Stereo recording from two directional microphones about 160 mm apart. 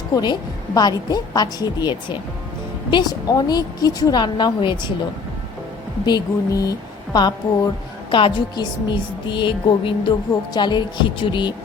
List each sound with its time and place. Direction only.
0.1 s a woman's voice: 25° left (ahead or behind)
6.1 s a woman's voice: 25° left (ahead or behind)